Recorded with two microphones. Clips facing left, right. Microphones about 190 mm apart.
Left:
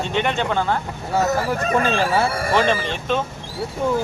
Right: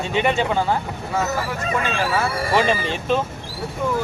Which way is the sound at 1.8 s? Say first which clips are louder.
Left 2 dB; 30° left (ahead or behind).